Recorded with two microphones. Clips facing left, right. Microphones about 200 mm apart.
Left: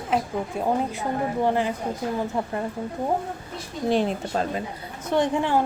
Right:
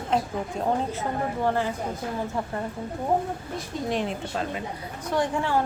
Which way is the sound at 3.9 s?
35° left (ahead or behind).